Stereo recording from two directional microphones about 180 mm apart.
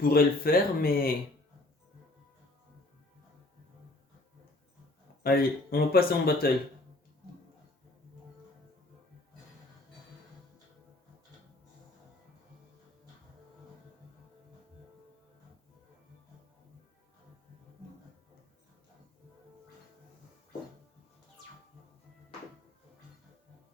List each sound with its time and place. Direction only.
0.0 s speech: 55° left (ahead or behind)
5.2 s speech: 55° left (ahead or behind)